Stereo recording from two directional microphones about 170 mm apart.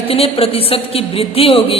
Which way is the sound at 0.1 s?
35° left (ahead or behind).